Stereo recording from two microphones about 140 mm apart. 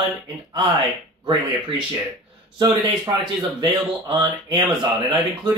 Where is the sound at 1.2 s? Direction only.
35° right (ahead or behind).